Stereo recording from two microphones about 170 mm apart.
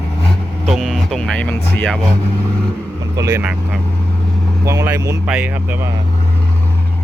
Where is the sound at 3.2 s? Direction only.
20° right (ahead or behind).